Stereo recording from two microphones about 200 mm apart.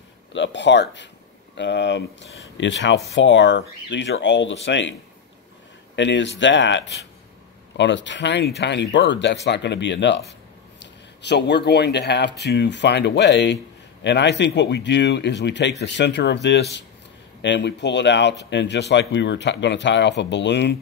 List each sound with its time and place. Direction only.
0.3 s speech: 65° left (ahead or behind)
5.9 s speech: 65° left (ahead or behind)